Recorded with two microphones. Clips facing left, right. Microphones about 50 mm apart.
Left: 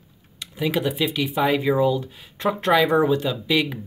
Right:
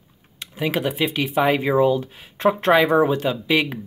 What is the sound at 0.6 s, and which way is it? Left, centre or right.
Speech, right.